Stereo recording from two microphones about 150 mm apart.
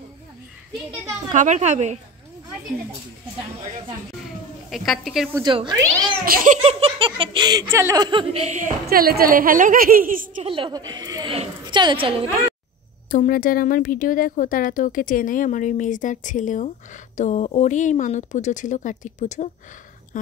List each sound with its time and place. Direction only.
1.3 s speech: 55° right (ahead or behind)
4.6 s a woman's voice: centre (ahead or behind)
5.4 s giggle: 30° right (ahead or behind)
6.2 s a woman's voice: 70° right (ahead or behind)
6.6 s giggle: 40° right (ahead or behind)
7.7 s speech: 15° right (ahead or behind)
8.0 s speech: 35° right (ahead or behind); by 8.7 s 55° right (ahead or behind)
8.8 s a woman's voice: 85° right; by 10.4 s 65° right (ahead or behind)
10.4 s a woman's voice: 35° right (ahead or behind)
13.1 s a woman's voice: 70° left (ahead or behind); by 19.5 s 55° left (ahead or behind)